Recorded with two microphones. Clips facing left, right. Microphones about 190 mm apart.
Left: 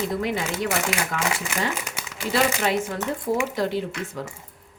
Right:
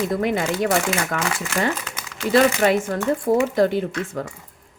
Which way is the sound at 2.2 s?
50° right (ahead or behind).